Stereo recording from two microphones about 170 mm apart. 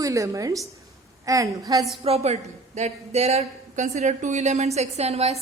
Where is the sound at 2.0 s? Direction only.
35° right (ahead or behind).